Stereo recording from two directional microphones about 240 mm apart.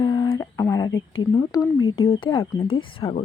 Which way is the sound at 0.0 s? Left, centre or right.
Centre.